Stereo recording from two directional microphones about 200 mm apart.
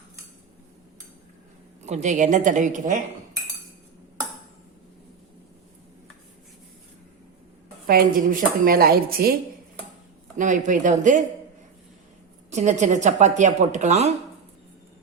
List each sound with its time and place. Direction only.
1.8 s speech: 35° right (ahead or behind)
7.9 s speech: 45° right (ahead or behind)
10.3 s speech: 40° right (ahead or behind)
12.5 s speech: 35° right (ahead or behind)